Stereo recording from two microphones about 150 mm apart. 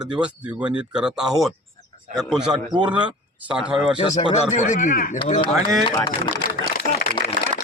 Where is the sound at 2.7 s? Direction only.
30° right (ahead or behind).